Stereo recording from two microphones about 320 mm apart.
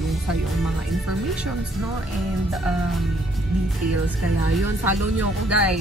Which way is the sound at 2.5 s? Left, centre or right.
Centre.